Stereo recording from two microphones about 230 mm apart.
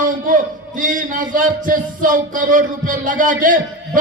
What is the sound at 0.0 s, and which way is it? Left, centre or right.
A man's voice, right.